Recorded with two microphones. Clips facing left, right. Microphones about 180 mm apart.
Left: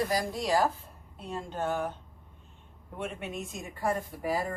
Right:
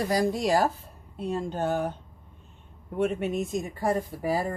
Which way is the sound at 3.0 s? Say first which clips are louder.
Right 10 dB; 40° right (ahead or behind).